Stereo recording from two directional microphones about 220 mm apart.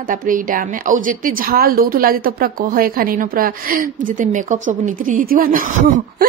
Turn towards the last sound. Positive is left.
turn(degrees=-40)  # may be behind; listen again after turning